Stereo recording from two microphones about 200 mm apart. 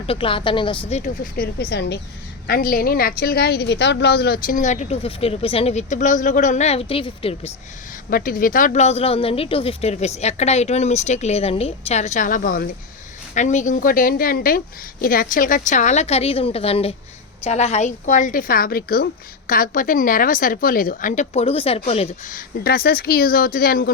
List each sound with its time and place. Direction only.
0.1 s a woman's voice: 25° left (ahead or behind)
8.1 s a woman's voice: 45° left (ahead or behind)